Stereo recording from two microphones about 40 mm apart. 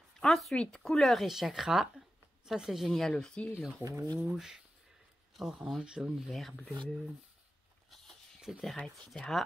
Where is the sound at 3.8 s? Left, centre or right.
Right.